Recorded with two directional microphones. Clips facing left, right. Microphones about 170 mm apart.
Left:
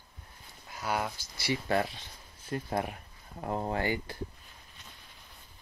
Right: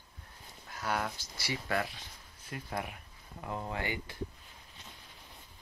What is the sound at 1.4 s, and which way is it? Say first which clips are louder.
Speech: left 5 dB; 30° left (ahead or behind).